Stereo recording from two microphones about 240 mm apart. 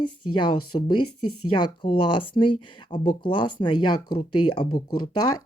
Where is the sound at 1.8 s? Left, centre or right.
Left.